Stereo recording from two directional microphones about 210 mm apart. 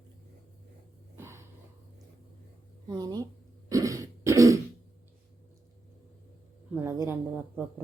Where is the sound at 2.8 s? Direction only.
20° right (ahead or behind).